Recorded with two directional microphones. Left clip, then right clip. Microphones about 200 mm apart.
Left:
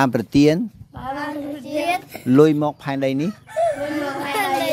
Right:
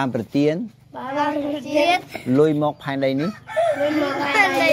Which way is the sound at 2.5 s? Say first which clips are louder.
Even; 30° left (ahead or behind).